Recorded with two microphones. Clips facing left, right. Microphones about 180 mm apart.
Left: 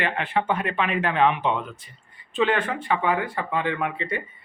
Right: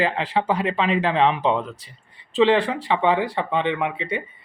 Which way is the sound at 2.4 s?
30° right (ahead or behind).